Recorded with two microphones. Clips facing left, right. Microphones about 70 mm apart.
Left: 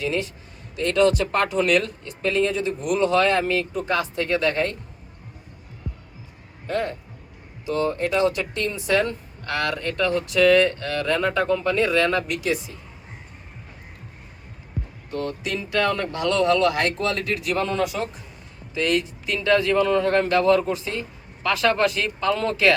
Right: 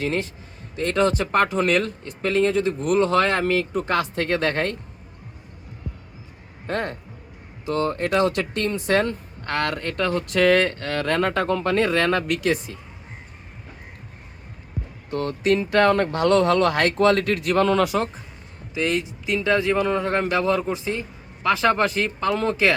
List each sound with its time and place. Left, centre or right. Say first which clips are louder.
0.0 s speech: even; right
0.8 s speech: left 2 dB; right
6.7 s speech: left 1 dB; right
15.1 s speech: right 6 dB; right
17.6 s speech: right 7 dB; right
18.7 s speech: left 1 dB; centre